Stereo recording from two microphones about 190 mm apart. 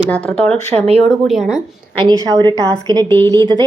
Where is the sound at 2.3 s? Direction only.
20° right (ahead or behind).